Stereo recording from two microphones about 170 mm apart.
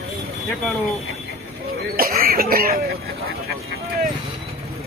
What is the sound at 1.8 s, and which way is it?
Speech, 60° right (ahead or behind).